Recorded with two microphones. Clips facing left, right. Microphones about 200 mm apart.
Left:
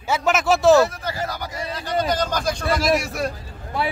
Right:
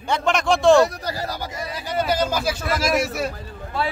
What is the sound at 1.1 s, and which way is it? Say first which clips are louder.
Speech: even; 35° right (ahead or behind).